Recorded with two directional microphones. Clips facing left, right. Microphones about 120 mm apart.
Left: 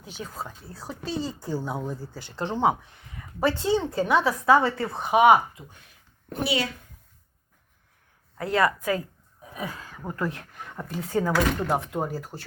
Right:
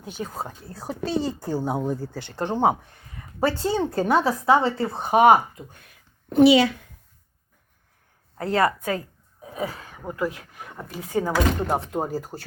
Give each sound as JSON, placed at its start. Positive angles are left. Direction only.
{"t": 0.2, "sound": "a woman's voice", "side_deg": -45}
{"t": 4.4, "sound": "a woman's voice", "side_deg": -25}
{"t": 5.8, "sound": "a sound", "side_deg": -75}
{"t": 8.4, "sound": "a woman's voice", "side_deg": -35}
{"t": 9.4, "sound": "throat clearing", "side_deg": -30}
{"t": 10.0, "sound": "speech", "side_deg": -10}
{"t": 12.0, "sound": "a woman's voice", "side_deg": -40}